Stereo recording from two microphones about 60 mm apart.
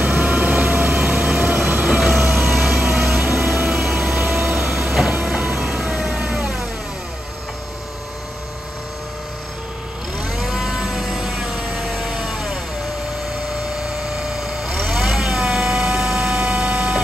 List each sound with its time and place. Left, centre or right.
0.0 s vehicle: centre
1.4 s train: right
2.3 s vehicle: centre
3.8 s train: centre
5.4 s music: centre
10.1 s cattle: right
10.4 s vehicle: centre
13.8 s a sound: centre
14.8 s vehicle: centre